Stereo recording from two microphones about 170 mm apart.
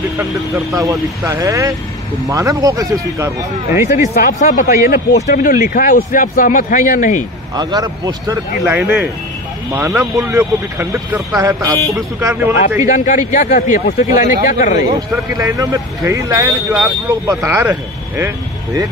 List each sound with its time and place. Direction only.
0.7 s speech: 20° right (ahead or behind)
4.2 s speech: 50° left (ahead or behind)
7.5 s speech: 25° right (ahead or behind)
8.6 s speech: 10° right (ahead or behind)
12.8 s speech: 45° left (ahead or behind)
14.8 s speech: 20° right (ahead or behind)